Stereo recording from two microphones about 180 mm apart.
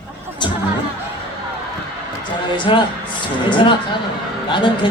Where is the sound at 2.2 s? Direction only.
25° left (ahead or behind).